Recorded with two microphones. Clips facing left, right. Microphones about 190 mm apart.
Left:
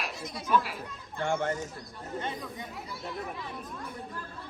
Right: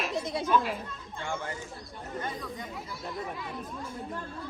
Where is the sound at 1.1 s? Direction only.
50° left (ahead or behind).